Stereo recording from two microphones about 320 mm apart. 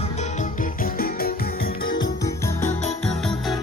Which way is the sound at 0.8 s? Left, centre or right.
Left.